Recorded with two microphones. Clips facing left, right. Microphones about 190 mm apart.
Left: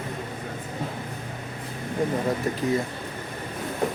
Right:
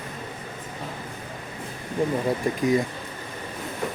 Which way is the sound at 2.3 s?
15° right (ahead or behind).